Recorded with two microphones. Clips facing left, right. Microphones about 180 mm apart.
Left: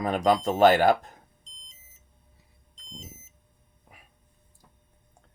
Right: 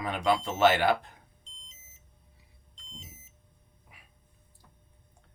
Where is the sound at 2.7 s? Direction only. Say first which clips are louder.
Left 5 dB; 40° left (ahead or behind).